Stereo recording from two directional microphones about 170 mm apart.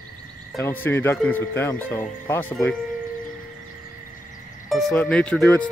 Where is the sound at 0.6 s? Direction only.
15° left (ahead or behind).